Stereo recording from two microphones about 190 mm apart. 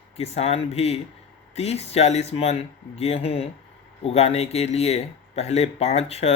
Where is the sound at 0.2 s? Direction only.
35° left (ahead or behind).